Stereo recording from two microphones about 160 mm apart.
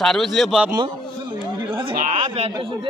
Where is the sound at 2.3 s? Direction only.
35° right (ahead or behind).